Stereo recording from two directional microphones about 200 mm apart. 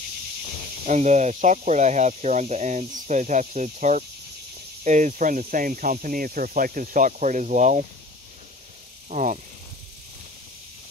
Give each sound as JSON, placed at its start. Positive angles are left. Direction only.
{"t": 0.8, "sound": "speech", "side_deg": -35}
{"t": 9.1, "sound": "speech", "side_deg": -40}